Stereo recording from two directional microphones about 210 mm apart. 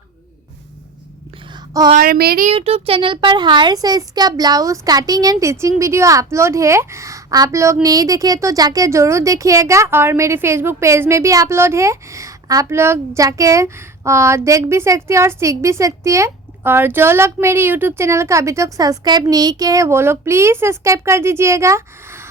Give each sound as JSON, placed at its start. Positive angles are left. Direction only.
{"t": 1.7, "sound": "speech", "side_deg": -20}
{"t": 2.0, "sound": "speech", "side_deg": -45}
{"t": 2.5, "sound": "a child's voice", "side_deg": -30}